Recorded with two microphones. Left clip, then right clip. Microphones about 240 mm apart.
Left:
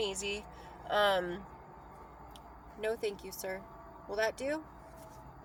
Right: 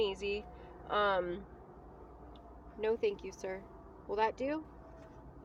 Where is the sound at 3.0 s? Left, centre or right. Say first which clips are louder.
Right 2 dB; centre.